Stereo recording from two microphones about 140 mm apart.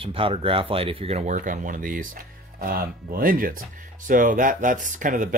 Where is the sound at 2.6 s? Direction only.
90° right.